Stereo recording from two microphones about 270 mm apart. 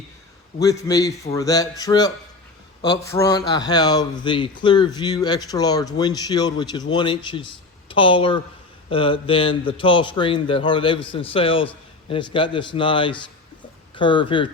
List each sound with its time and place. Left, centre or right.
0.6 s a man's voice: centre